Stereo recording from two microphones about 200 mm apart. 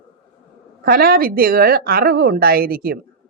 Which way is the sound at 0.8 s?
45° right (ahead or behind).